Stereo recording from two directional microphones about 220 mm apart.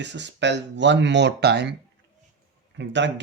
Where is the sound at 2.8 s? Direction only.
55° right (ahead or behind).